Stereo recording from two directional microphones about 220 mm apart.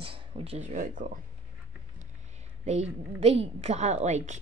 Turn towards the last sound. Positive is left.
turn(degrees=-30)  # may be behind; listen again after turning